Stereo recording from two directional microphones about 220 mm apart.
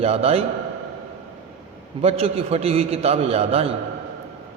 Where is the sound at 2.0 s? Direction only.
25° right (ahead or behind).